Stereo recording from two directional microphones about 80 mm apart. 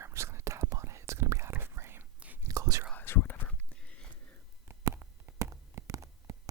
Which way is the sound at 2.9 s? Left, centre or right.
Left.